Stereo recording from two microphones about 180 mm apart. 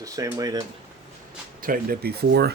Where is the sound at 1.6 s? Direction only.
50° right (ahead or behind).